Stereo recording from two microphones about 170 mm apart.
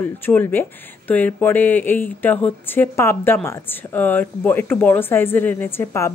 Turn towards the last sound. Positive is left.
turn(degrees=15)  # may be behind; listen again after turning